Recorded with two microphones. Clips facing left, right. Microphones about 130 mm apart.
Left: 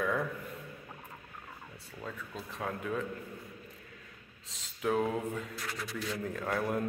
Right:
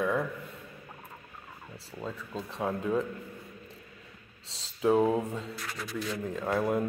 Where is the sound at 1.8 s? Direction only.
30° right (ahead or behind).